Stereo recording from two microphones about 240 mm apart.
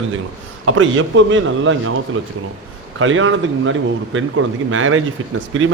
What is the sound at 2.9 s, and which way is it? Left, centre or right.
A man's voice, right.